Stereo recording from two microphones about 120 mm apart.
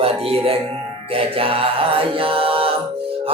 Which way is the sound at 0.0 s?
55° right (ahead or behind).